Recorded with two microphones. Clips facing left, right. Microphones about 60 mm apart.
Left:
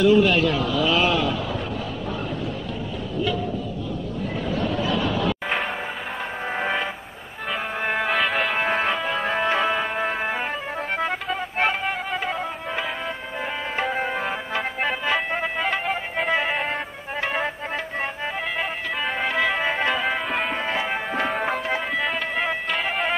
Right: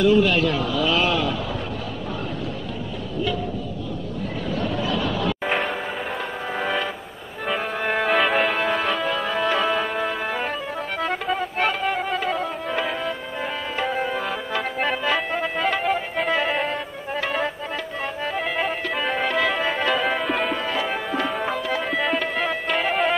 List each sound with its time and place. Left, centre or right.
0.0 s a man's voice: centre
4.5 s music: centre
6.5 s music: left
7.8 s music: centre
8.5 s music: left
11.5 s music: left
11.9 s music: centre
13.9 s tabla: left
14.8 s music: centre
18.6 s music: centre
20.0 s music: centre
20.5 s music: left
21.3 s tabla: left
21.9 s music: centre